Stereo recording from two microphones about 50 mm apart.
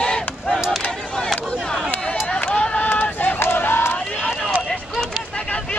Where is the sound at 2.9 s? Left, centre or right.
Left.